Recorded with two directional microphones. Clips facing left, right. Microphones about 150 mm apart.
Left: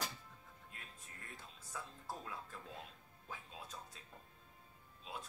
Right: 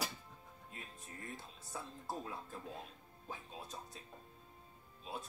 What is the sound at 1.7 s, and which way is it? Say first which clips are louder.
Speech: right 4 dB; 25° right (ahead or behind).